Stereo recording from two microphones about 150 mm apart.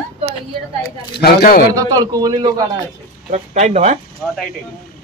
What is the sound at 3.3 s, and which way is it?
Speech, 50° right (ahead or behind).